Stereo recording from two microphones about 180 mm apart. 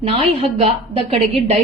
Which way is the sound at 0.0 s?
35° right (ahead or behind).